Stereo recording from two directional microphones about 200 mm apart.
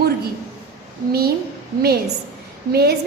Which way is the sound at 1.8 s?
50° right (ahead or behind).